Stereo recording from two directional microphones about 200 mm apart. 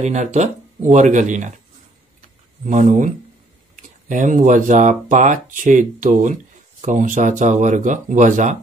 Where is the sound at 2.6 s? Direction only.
40° right (ahead or behind).